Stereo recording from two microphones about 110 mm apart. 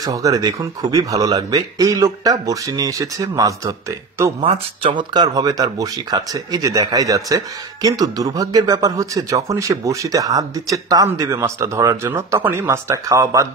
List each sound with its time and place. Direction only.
0.0 s speech: 35° right (ahead or behind)
4.4 s speech: 65° right (ahead or behind)
4.9 s speech: 40° right (ahead or behind)